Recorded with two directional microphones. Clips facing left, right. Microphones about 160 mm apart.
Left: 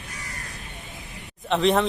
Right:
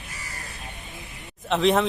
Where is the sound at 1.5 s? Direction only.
Centre (ahead or behind).